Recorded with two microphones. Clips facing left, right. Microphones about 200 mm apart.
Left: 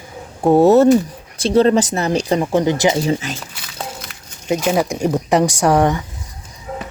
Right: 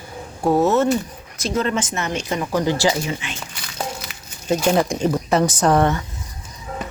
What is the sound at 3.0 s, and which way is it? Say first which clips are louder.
Speech: left 8 dB; 40° left (ahead or behind).